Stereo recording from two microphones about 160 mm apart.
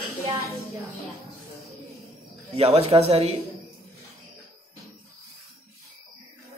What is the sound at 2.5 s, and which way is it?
Speech, 40° right (ahead or behind).